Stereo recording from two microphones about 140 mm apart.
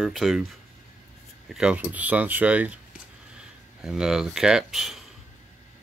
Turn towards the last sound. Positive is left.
turn(degrees=0)  # may be behind; listen again after turning